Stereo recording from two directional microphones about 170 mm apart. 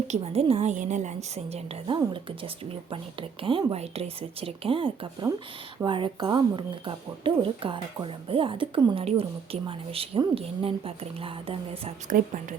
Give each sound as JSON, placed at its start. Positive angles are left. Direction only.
{"t": 0.1, "sound": "speech", "side_deg": -35}
{"t": 12.0, "sound": "speech", "side_deg": -50}